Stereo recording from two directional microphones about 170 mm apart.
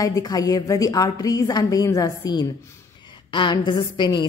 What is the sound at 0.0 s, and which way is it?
A woman's voice, 20° left (ahead or behind).